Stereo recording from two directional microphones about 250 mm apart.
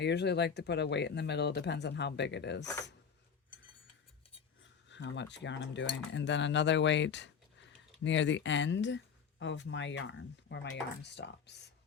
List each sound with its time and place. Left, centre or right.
0.0 s speech: left
4.6 s speech: left